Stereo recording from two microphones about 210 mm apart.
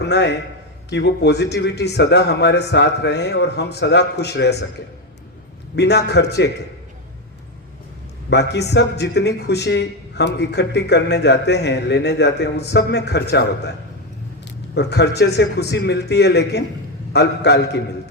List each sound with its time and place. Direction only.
0.0 s a man's voice: 55° left (ahead or behind)
5.7 s a man's voice: 55° left (ahead or behind)
8.3 s a man's voice: 55° left (ahead or behind)
14.8 s a man's voice: 50° left (ahead or behind)